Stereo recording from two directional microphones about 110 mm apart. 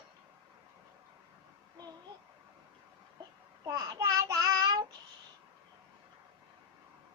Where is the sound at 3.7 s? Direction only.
30° right (ahead or behind).